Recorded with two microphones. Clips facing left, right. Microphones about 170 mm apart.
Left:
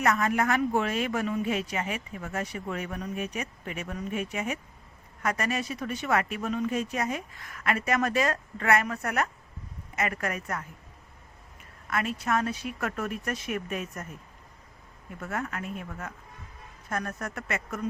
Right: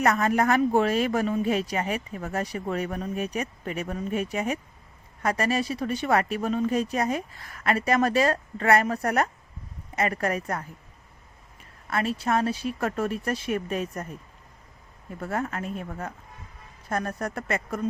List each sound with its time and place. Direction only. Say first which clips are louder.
0.0 s speech: right 3 dB; 35° right (ahead or behind)
11.9 s speech: right 3 dB; 30° right (ahead or behind)
15.2 s speech: right 4 dB; 35° right (ahead or behind)